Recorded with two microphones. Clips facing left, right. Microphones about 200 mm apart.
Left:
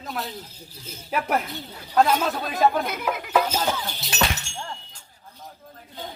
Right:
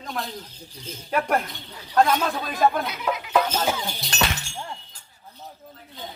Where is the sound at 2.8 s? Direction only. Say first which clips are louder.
Even; 50° left (ahead or behind).